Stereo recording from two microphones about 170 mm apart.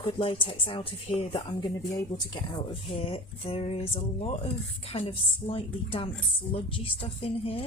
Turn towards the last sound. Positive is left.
turn(degrees=35)  # may be behind; listen again after turning